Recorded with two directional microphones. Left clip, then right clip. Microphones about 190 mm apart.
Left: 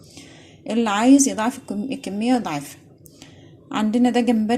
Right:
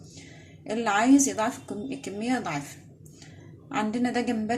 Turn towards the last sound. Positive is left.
turn(degrees=40)  # may be behind; listen again after turning